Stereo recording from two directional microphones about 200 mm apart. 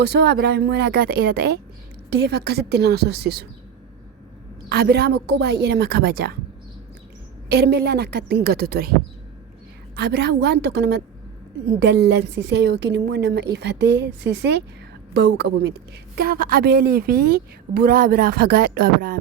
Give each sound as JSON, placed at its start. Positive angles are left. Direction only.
{"t": 0.0, "sound": "a woman's voice", "side_deg": -55}
{"t": 4.7, "sound": "a woman's voice", "side_deg": -55}
{"t": 7.5, "sound": "a woman's voice", "side_deg": -55}
{"t": 12.0, "sound": "a woman's voice", "side_deg": -60}